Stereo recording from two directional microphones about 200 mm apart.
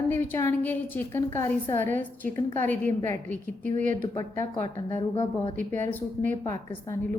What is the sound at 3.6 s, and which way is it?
Speech, 40° right (ahead or behind).